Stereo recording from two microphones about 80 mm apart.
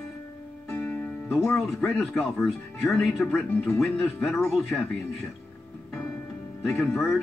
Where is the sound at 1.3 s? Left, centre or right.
Centre.